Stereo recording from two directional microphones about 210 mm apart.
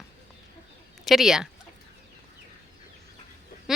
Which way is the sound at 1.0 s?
Centre (ahead or behind).